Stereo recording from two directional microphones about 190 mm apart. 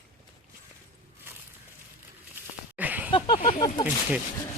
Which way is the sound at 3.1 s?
25° left (ahead or behind).